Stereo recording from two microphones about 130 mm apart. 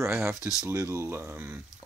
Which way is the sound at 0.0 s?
20° right (ahead or behind).